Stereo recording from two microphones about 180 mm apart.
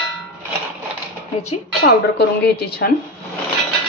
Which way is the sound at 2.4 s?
60° left (ahead or behind).